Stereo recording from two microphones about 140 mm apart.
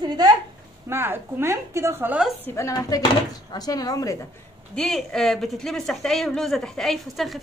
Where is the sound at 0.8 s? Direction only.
15° right (ahead or behind).